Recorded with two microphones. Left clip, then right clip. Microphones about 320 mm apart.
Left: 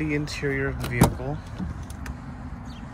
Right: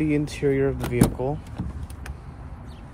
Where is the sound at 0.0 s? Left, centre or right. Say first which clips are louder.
Right 4 dB; centre.